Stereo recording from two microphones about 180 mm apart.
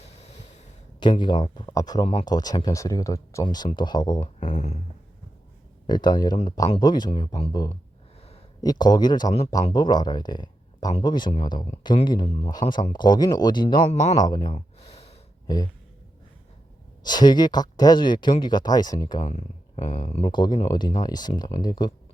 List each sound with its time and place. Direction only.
0.9 s speech: 25° left (ahead or behind)
4.2 s speech: 40° left (ahead or behind)
5.9 s speech: 25° left (ahead or behind)
14.2 s a sound: 25° left (ahead or behind)
15.5 s speech: 20° left (ahead or behind)
17.0 s speech: 25° left (ahead or behind)
19.3 s speech: 35° left (ahead or behind)